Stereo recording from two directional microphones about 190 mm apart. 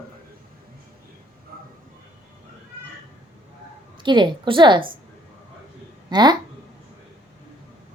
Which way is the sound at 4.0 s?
25° right (ahead or behind).